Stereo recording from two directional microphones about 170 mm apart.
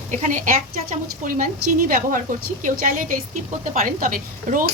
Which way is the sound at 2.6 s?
50° right (ahead or behind).